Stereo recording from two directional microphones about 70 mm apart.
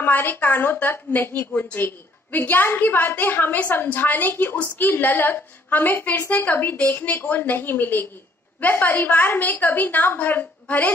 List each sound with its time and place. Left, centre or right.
0.0 s a woman's voice: left